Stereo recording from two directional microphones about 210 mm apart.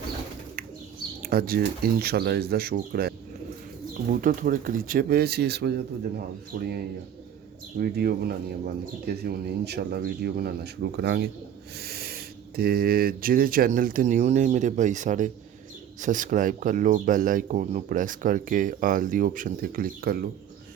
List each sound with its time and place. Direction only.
1.2 s speech: 45° right (ahead or behind)